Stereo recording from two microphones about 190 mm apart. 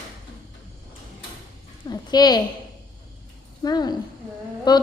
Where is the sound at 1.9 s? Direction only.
20° left (ahead or behind).